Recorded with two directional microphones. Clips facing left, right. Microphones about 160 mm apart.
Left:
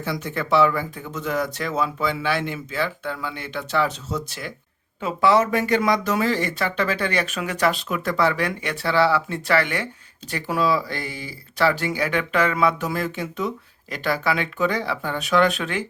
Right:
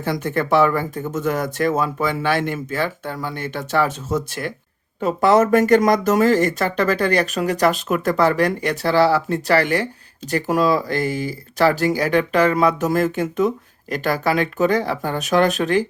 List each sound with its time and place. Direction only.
0.0 s speech: 50° right (ahead or behind)